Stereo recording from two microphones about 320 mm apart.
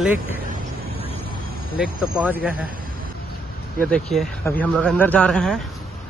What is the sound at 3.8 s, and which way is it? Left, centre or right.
Speech, centre.